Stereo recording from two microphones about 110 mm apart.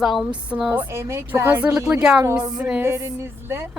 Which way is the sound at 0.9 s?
25° right (ahead or behind).